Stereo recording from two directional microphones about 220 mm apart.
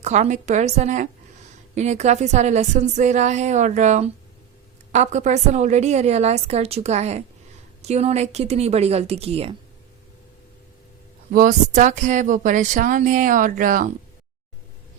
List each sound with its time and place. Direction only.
0.0 s a woman's voice: 30° right (ahead or behind)
11.3 s speech: 35° right (ahead or behind)